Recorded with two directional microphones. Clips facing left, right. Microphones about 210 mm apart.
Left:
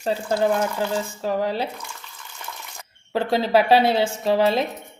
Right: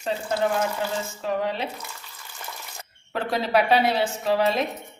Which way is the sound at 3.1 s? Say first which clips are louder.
Left 4 dB; 30° left (ahead or behind).